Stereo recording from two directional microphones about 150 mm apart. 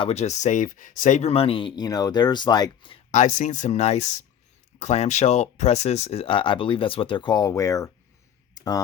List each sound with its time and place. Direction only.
0.0 s speech: 45° left (ahead or behind)
3.1 s speech: 55° left (ahead or behind); by 7.9 s 20° left (ahead or behind)
8.5 s a sound: 25° left (ahead or behind)